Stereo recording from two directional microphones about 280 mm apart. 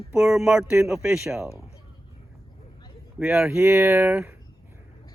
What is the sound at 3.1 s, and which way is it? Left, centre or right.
Speech, centre.